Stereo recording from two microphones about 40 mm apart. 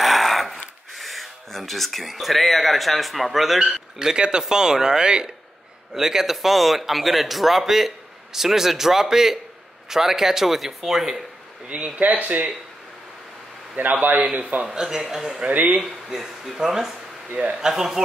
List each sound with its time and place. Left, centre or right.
0.0 s a sound: centre
0.9 s speech: centre
4.0 s a man's voice: centre
5.9 s a man's voice: centre
11.6 s speech: right
13.7 s speech: right
14.7 s a man's voice: centre
15.4 s speech: right
15.8 s a man's voice: centre